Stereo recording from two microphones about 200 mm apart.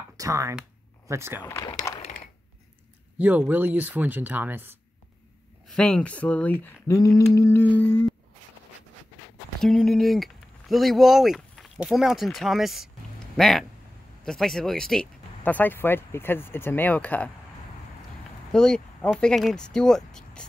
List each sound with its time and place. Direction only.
0.2 s speech: 15° right (ahead or behind)
1.4 s speech: 15° left (ahead or behind)
1.7 s a sound: 20° left (ahead or behind)
3.2 s speech: 10° right (ahead or behind)
5.7 s speech: 5° left (ahead or behind)
9.6 s speech: centre (ahead or behind)
18.5 s speech: 5° left (ahead or behind)